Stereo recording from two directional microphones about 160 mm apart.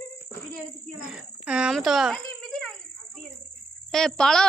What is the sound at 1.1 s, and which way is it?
Speech, 5° right (ahead or behind).